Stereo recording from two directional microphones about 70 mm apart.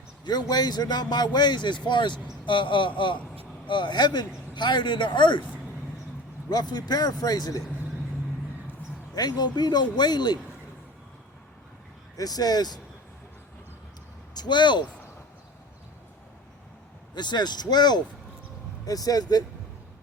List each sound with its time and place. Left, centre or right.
0.3 s a man's voice: left
3.7 s a man's voice: left
6.5 s speech: left
9.1 s a man's voice: left
12.1 s speech: left
14.3 s a man's voice: left
17.2 s a man's voice: left
18.9 s speech: left